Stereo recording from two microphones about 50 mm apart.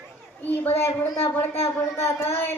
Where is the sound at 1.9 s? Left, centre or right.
Left.